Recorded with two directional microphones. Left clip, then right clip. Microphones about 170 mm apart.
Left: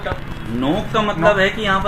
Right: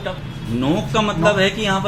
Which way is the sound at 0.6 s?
15° right (ahead or behind).